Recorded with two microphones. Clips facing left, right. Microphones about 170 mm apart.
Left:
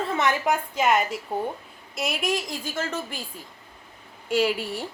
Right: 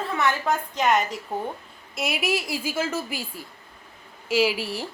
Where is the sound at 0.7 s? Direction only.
5° left (ahead or behind).